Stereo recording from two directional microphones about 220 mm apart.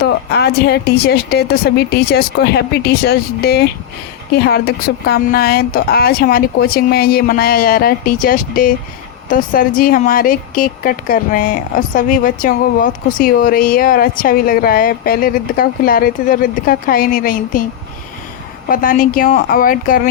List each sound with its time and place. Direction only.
0.0 s a woman's voice: 50° left (ahead or behind)
18.7 s a woman's voice: 40° left (ahead or behind)